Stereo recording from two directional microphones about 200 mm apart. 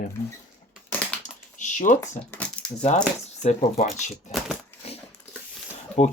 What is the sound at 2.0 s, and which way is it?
Speech, 15° left (ahead or behind).